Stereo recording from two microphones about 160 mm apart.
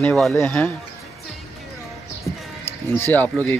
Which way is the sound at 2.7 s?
15° left (ahead or behind).